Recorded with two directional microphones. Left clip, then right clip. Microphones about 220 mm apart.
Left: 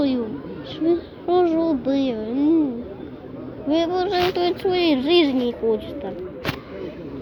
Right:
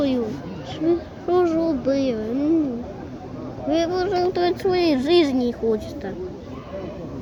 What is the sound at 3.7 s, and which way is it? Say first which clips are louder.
Speech: left 1 dB; 25° left (ahead or behind).